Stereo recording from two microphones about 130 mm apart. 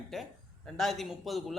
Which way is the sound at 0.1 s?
Centre (ahead or behind).